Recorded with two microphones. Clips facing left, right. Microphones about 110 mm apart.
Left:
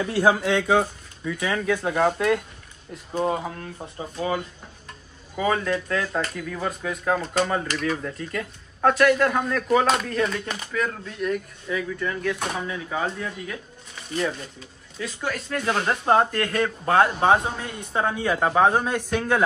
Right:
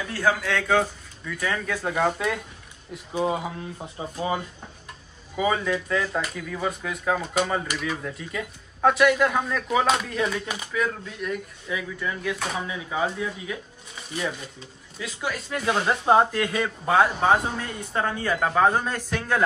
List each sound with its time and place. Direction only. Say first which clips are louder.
0.2 s speech: left 4 dB; 25° left (ahead or behind)
0.7 s speech: left 2 dB; 5° left (ahead or behind); by 4.1 s 10° right (ahead or behind)
5.3 s speech: left 1 dB; 5° right (ahead or behind)
15.0 s speech: left 1 dB; 5° right (ahead or behind)